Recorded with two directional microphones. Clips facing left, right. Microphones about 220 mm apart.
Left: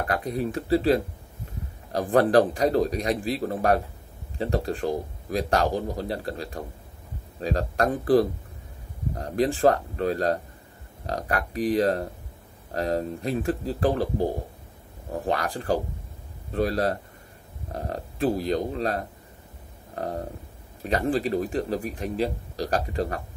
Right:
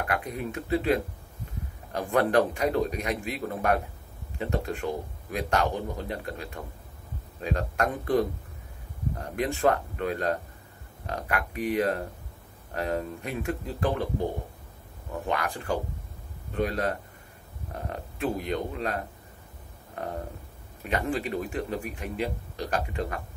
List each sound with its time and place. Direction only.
0.0 s speech: 35° left (ahead or behind)